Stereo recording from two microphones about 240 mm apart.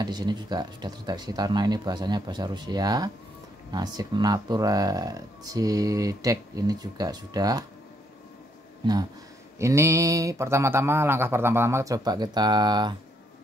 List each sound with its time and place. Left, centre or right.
0.0 s speech: centre
9.6 s speech: centre